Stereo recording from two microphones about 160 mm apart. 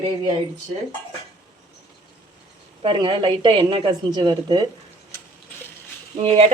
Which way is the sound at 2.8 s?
30° right (ahead or behind).